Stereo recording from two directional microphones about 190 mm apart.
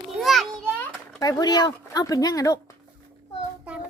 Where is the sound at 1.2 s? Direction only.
20° left (ahead or behind).